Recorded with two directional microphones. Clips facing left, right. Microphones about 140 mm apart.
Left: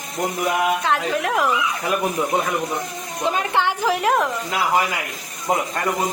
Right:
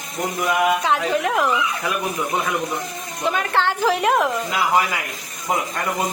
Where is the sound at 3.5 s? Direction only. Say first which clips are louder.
Right 3 dB; 10° left (ahead or behind).